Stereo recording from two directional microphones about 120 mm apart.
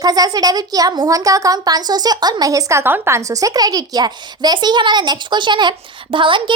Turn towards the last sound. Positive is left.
turn(degrees=-45)  # may be behind; listen again after turning